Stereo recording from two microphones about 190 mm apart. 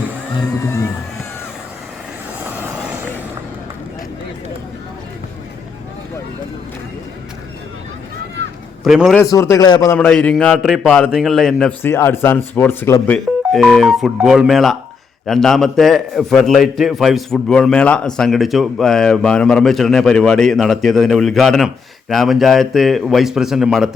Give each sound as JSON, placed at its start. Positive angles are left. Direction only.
{"t": 2.5, "sound": "vehicle", "side_deg": -10}
{"t": 8.8, "sound": "a man's voice", "side_deg": 0}
{"t": 9.1, "sound": "a man's voice", "side_deg": 15}